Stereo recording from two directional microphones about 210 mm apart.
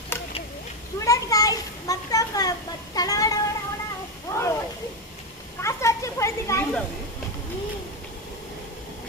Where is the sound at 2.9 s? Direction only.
15° left (ahead or behind).